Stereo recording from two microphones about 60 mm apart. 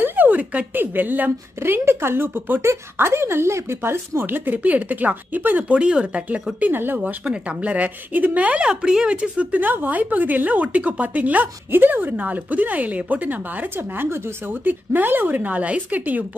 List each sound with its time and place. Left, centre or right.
0.0 s speech: right
2.6 s speech: right
5.8 s speech: centre
6.6 s speech: right
7.2 s speech: right
8.6 s speech: centre; by 16.3 s right